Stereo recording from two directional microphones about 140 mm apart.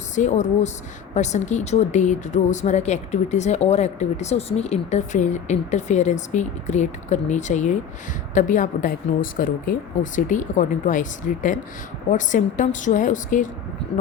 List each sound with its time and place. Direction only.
0.2 s speech: 55° left (ahead or behind)